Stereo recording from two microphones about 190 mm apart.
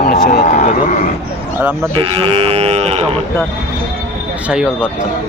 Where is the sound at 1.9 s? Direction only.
30° right (ahead or behind).